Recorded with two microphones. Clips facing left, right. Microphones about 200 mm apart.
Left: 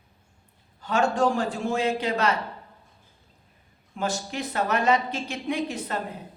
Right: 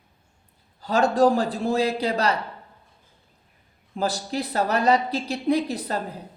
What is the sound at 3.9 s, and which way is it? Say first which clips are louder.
A man's voice: right 3 dB; 35° right (ahead or behind).